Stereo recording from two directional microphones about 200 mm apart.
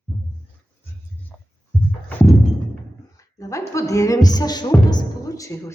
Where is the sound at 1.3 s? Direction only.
5° left (ahead or behind).